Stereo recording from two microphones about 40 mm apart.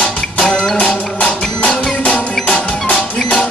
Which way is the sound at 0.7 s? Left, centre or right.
Left.